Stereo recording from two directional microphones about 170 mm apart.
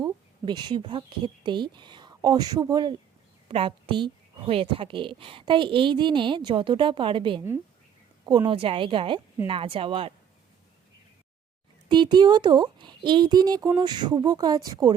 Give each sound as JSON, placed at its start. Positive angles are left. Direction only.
{"t": 0.0, "sound": "a woman's voice", "side_deg": -25}
{"t": 11.9, "sound": "a woman's voice", "side_deg": -25}